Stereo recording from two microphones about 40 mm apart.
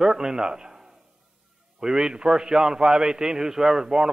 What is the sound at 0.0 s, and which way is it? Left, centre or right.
A man's voice, centre.